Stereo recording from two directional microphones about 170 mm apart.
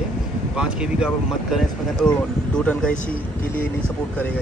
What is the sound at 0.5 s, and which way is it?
Speech, 5° right (ahead or behind).